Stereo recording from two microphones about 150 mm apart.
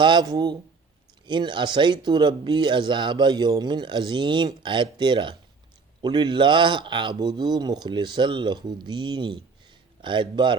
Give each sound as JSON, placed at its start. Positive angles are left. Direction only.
{"t": 0.0, "sound": "speech", "side_deg": -30}